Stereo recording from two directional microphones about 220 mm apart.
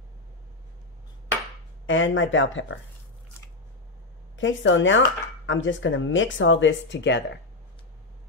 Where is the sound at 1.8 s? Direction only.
60° left (ahead or behind).